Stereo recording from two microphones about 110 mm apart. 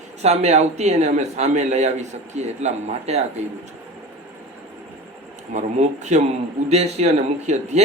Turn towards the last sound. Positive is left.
turn(degrees=-90)